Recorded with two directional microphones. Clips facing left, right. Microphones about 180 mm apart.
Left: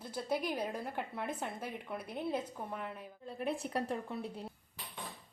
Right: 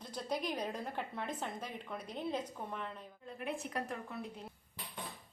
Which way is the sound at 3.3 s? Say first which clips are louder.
Left 4 dB; 35° left (ahead or behind).